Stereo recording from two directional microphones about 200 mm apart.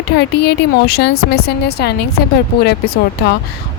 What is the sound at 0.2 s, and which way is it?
A woman's voice, 55° left (ahead or behind).